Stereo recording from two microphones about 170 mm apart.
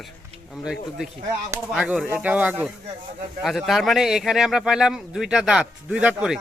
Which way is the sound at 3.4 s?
Centre (ahead or behind).